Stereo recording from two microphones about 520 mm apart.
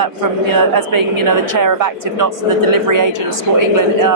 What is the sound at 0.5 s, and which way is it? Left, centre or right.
Speech, right.